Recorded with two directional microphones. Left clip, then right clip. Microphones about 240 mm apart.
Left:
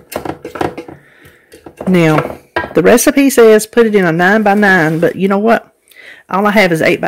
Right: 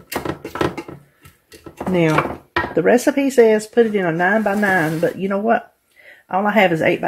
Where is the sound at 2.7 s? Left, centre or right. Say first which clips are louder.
Left 7 dB; left.